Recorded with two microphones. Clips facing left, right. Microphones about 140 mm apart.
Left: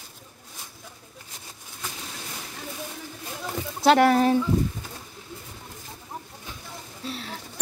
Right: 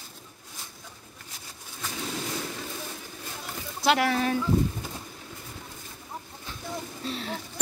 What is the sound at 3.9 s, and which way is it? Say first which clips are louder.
Speech: left 6 dB; 50° left (ahead or behind).